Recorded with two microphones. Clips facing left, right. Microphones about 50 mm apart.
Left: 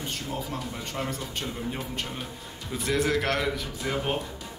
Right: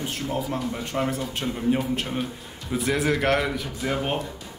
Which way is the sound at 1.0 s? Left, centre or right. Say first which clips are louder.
Right 6 dB; centre.